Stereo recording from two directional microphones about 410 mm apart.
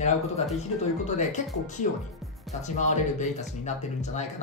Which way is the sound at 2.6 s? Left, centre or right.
Centre.